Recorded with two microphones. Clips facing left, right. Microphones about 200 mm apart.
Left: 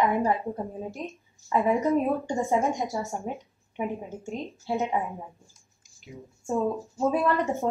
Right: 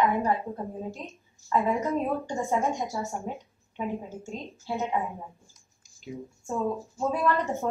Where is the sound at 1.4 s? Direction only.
15° left (ahead or behind).